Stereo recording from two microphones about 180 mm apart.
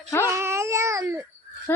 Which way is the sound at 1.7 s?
10° left (ahead or behind).